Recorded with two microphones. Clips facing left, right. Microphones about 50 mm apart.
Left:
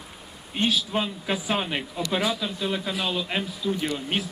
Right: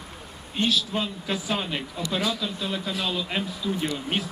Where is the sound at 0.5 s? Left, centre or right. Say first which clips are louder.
Even; centre.